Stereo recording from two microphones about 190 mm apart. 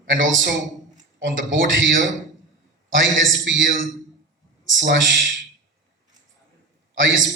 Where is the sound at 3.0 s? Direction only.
80° right.